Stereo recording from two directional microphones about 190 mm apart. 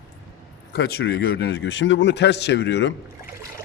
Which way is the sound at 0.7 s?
55° left (ahead or behind).